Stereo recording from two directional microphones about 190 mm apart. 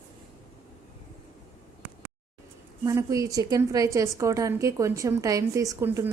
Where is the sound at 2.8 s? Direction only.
15° right (ahead or behind).